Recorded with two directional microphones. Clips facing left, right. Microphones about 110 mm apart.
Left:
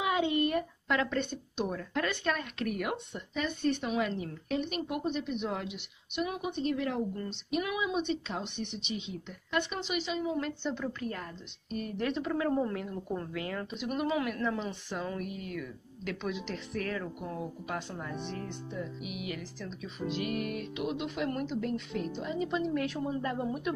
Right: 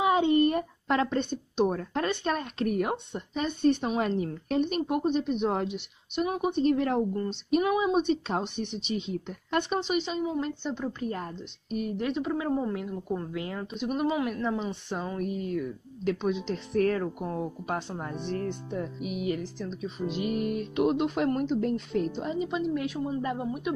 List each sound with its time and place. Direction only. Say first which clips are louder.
0.0 s a sound: right 6 dB; 30° right (ahead or behind)
2.0 s speech: right 5 dB; 35° right (ahead or behind)
9.8 s speech: right 5 dB; 30° right (ahead or behind)
10.3 s speech: right 2 dB; 20° right (ahead or behind)
11.7 s a woman's voice: right 3 dB; 10° right (ahead or behind)
13.3 s speech: right 2 dB; 25° right (ahead or behind)
15.0 s speech: right 5 dB; 30° right (ahead or behind)
18.7 s music: right 5 dB; 55° right (ahead or behind)
19.0 s speech: right 8 dB; 35° right (ahead or behind)
20.7 s speech: right 12 dB; 45° right (ahead or behind)
22.4 s a woman's voice: right 1 dB; 20° right (ahead or behind)